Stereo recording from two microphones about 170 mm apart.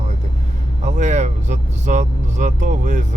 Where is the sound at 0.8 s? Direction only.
45° right (ahead or behind).